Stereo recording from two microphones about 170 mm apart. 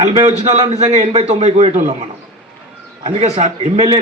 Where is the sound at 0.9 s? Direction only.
45° right (ahead or behind).